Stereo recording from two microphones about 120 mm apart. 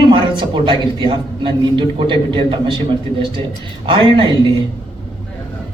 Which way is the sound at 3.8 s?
45° right (ahead or behind).